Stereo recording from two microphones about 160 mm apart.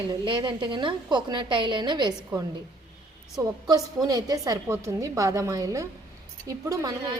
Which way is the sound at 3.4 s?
25° right (ahead or behind).